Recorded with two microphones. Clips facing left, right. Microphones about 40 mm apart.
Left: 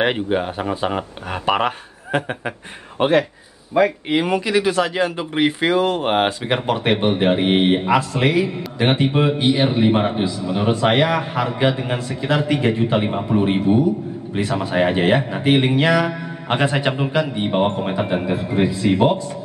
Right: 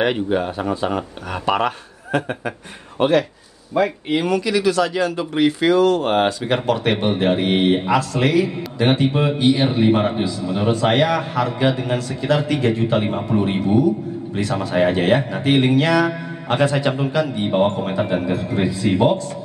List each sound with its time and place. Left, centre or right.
0.0 s speech: left
3.0 s speech: left
3.7 s speech: centre
4.3 s speech: left
13.0 s speech: centre